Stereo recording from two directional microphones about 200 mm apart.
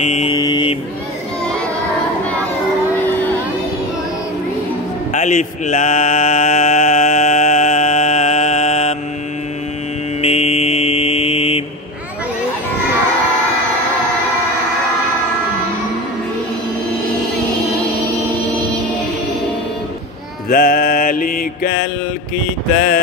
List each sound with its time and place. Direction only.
0.0 s mantra: 35° left (ahead or behind)
0.4 s mantra: 20° left (ahead or behind)
5.1 s a sound: 40° left (ahead or behind)
10.2 s mantra: 30° left (ahead or behind)
20.4 s music: 45° left (ahead or behind)